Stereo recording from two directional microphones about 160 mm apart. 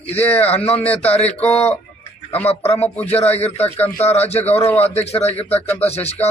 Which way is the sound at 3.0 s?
40° left (ahead or behind).